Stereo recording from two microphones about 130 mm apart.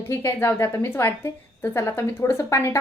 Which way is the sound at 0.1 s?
15° left (ahead or behind).